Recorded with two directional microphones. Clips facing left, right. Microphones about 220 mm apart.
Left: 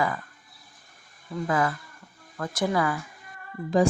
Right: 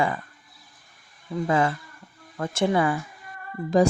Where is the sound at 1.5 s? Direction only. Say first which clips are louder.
Right 3 dB; 25° right (ahead or behind).